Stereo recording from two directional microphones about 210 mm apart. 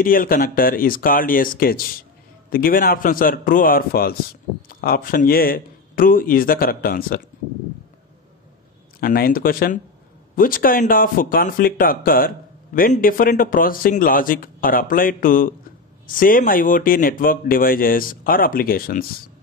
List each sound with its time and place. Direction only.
0.0 s speech: 40° left (ahead or behind)
9.0 s speech: 45° left (ahead or behind)